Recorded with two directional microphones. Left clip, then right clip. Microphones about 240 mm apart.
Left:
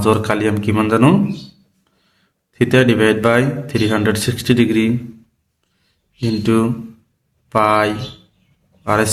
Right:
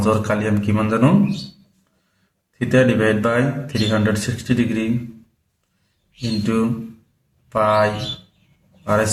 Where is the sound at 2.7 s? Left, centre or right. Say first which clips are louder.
Left 2 dB; left.